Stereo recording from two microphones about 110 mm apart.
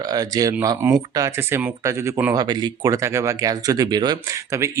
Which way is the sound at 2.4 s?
40° right (ahead or behind).